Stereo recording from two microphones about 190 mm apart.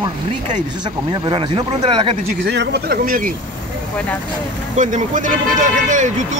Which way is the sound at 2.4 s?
65° right (ahead or behind).